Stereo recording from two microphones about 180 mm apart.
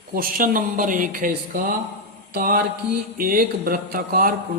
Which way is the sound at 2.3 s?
50° right (ahead or behind).